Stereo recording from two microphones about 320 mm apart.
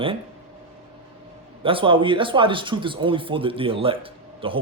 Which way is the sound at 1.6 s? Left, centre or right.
Centre.